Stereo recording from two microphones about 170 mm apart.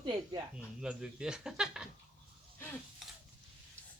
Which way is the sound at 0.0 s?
25° right (ahead or behind).